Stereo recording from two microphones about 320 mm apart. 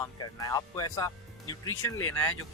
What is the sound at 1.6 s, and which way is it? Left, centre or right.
Speech, left.